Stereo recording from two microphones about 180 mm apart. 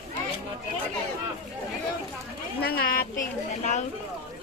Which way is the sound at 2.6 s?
60° left (ahead or behind).